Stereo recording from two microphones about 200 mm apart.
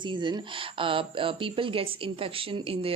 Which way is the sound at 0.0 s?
25° right (ahead or behind).